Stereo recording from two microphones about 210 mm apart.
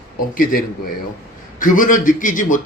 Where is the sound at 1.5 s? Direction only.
40° left (ahead or behind).